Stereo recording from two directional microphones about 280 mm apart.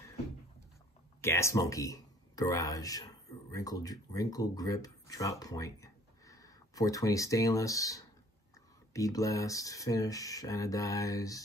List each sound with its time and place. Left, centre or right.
1.2 s speech: centre